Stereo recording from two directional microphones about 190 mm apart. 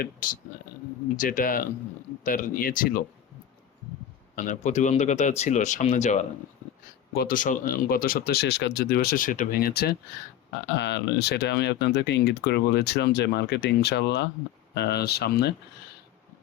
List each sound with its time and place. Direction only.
1.1 s speech: 45° left (ahead or behind)
4.4 s speech: 40° left (ahead or behind)
7.1 s speech: 55° left (ahead or behind)